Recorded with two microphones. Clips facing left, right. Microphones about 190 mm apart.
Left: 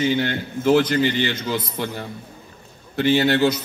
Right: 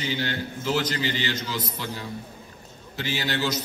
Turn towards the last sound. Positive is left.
turn(degrees=55)  # may be behind; listen again after turning